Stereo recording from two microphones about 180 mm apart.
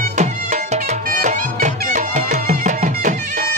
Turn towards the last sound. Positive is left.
turn(degrees=-45)  # may be behind; listen again after turning